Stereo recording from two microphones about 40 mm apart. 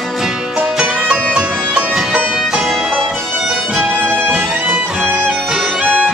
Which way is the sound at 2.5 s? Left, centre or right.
Centre.